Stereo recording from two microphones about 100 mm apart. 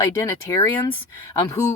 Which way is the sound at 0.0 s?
30° left (ahead or behind).